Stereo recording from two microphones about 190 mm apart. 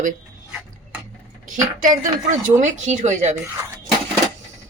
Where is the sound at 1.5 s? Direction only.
40° right (ahead or behind).